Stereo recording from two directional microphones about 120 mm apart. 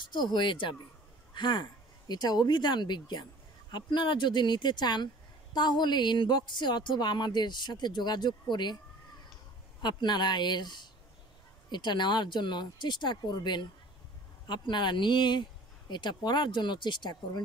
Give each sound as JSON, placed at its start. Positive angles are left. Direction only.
{"t": 0.0, "sound": "speech", "side_deg": 40}
{"t": 9.8, "sound": "speech", "side_deg": 35}